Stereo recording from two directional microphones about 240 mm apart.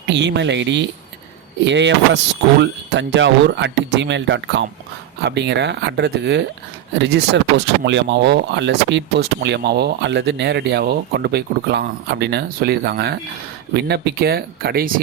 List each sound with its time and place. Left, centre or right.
0.1 s speech: right